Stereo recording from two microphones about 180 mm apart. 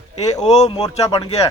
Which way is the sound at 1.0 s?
20° left (ahead or behind).